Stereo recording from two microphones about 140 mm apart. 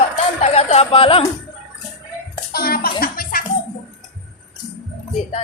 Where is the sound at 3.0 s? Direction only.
90° left.